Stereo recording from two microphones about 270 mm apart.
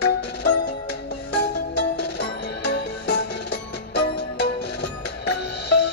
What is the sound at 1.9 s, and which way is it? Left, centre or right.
Music, left.